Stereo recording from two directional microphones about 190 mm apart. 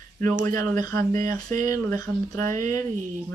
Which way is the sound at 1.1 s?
40° right (ahead or behind).